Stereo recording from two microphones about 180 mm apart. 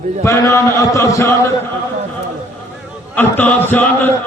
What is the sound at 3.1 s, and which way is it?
A man's voice, 10° left (ahead or behind).